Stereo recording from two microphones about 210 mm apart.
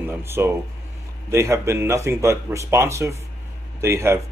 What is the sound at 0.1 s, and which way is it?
Speech, 10° right (ahead or behind).